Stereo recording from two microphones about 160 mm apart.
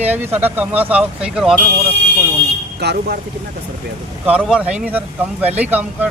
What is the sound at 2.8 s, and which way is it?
Speech, 90° right.